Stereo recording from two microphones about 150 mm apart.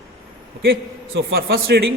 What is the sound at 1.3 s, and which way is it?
Speech, 90° right.